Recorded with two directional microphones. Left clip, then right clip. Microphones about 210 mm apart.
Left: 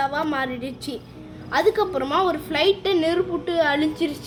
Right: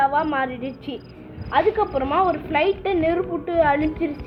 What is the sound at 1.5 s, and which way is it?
A woman's voice, 25° left (ahead or behind).